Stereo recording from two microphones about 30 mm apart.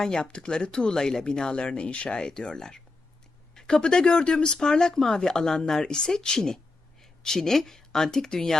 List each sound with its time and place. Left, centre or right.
0.0 s speech: left
2.0 s speech: left
3.5 s a sound: left
3.8 s speech: left
4.5 s speech: left